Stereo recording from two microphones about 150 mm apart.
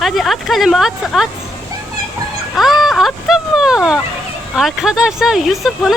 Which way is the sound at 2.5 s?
Centre (ahead or behind).